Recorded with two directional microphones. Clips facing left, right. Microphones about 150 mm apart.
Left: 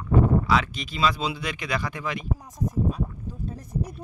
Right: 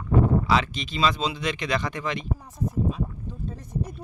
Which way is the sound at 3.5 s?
10° left (ahead or behind).